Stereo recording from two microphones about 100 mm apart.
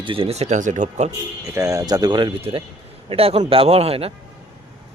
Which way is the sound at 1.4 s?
35° right (ahead or behind).